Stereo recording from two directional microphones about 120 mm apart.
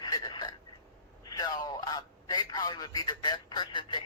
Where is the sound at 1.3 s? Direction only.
35° left (ahead or behind).